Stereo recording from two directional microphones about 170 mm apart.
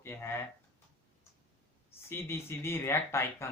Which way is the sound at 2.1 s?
15° left (ahead or behind).